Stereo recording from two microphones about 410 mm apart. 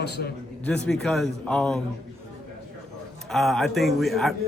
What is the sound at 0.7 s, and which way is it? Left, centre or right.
A man's voice, centre.